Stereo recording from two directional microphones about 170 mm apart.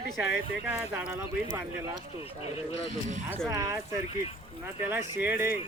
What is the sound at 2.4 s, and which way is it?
Speech, 35° left (ahead or behind).